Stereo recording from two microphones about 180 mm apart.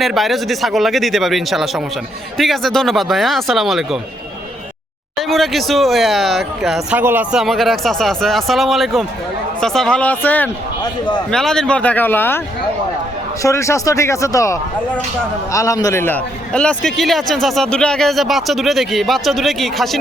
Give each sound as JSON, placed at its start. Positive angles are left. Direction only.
{"t": 0.0, "sound": "a man's voice", "side_deg": 0}
{"t": 5.3, "sound": "a man's voice", "side_deg": 0}
{"t": 13.4, "sound": "a man's voice", "side_deg": 15}